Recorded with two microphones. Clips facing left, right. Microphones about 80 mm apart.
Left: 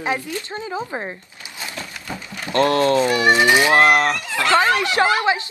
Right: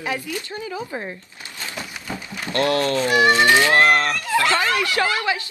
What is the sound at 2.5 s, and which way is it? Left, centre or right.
Speech, left.